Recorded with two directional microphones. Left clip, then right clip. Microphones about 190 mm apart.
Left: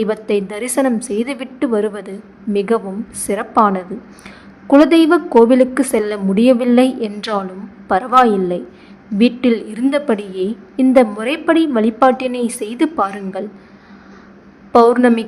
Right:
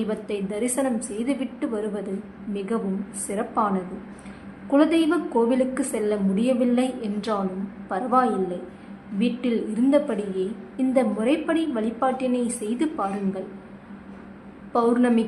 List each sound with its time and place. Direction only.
0.0 s a woman's voice: 35° left (ahead or behind)
14.7 s a woman's voice: 40° left (ahead or behind)